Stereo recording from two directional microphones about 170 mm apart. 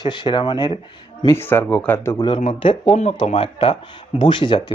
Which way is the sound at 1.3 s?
15° left (ahead or behind).